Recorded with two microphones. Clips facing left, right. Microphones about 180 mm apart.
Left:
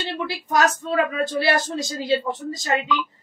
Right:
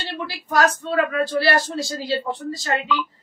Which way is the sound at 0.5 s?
20° left (ahead or behind).